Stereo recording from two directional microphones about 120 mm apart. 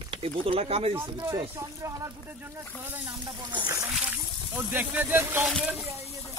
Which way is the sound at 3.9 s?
5° right (ahead or behind).